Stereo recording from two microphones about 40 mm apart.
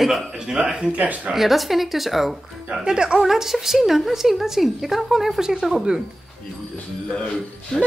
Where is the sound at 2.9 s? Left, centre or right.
Centre.